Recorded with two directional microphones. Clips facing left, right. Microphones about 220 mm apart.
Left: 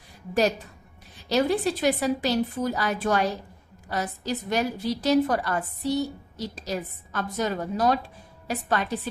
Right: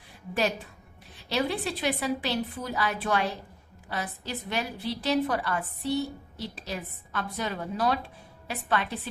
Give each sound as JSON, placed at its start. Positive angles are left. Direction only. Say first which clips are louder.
{"t": 1.3, "sound": "a woman's voice", "louder": "left 6 dB", "side_deg": 40}